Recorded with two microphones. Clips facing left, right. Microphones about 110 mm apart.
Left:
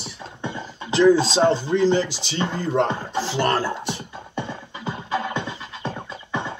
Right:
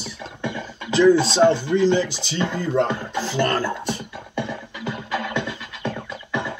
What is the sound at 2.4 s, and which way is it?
Speech, 25° left (ahead or behind).